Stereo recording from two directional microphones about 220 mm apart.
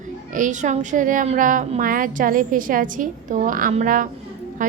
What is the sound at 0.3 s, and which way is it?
A woman's voice, 35° right (ahead or behind).